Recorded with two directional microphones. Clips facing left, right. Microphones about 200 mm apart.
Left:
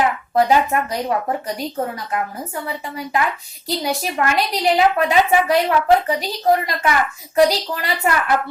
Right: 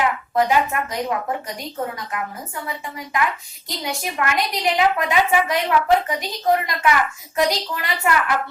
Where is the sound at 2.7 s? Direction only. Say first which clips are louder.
Left 3 dB; 35° left (ahead or behind).